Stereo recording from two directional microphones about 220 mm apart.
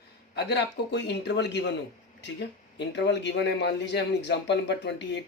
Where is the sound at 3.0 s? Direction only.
50° left (ahead or behind).